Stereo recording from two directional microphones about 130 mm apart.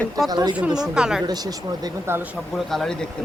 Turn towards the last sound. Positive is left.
turn(degrees=5)  # may be behind; listen again after turning